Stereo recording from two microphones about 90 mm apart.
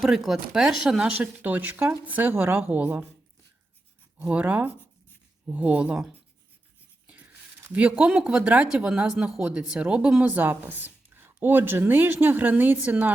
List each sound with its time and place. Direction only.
0.0 s speech: 5° right (ahead or behind); by 3.1 s 20° right (ahead or behind)
4.2 s speech: 15° right (ahead or behind)
7.7 s speech: 15° right (ahead or behind)